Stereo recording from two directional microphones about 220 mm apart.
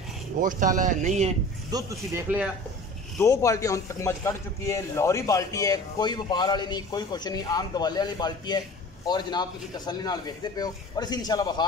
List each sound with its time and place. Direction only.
0.4 s speech: 35° right (ahead or behind)
1.7 s speech: 15° right (ahead or behind)
3.2 s a man's voice: 15° left (ahead or behind)